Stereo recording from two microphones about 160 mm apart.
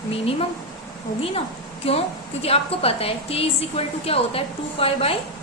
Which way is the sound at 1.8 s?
35° left (ahead or behind).